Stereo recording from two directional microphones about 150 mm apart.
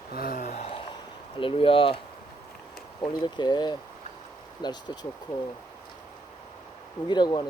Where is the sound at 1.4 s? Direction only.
35° left (ahead or behind).